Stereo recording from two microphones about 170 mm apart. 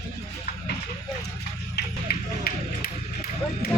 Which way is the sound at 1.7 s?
60° left (ahead or behind).